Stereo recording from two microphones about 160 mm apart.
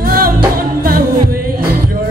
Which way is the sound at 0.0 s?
65° right (ahead or behind).